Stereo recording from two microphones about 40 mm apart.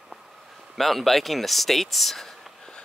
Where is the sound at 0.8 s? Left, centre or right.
Centre.